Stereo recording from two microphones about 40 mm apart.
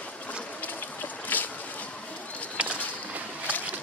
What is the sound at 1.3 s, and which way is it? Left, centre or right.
Boat, left.